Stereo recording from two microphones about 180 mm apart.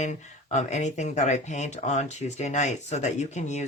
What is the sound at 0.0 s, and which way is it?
Speech, 40° left (ahead or behind).